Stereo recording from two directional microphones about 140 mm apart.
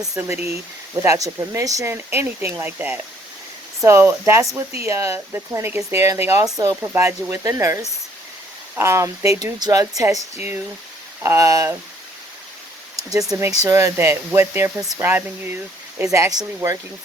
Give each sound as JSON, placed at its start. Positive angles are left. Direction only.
{"t": 0.1, "sound": "speech", "side_deg": -15}
{"t": 13.0, "sound": "speech", "side_deg": -25}